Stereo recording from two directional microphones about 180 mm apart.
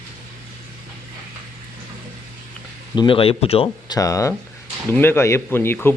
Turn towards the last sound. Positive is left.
turn(degrees=10)  # may be behind; listen again after turning